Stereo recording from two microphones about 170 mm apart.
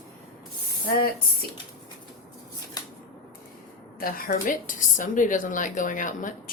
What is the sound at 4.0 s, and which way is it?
A woman's voice, 55° left (ahead or behind).